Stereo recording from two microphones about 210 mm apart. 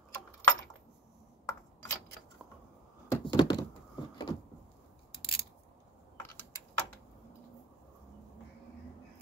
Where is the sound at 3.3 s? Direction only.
20° left (ahead or behind).